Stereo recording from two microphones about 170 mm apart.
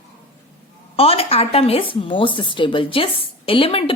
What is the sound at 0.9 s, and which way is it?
A woman's voice, 35° left (ahead or behind).